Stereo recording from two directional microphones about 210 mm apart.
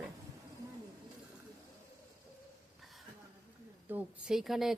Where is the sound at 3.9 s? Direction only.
Centre (ahead or behind).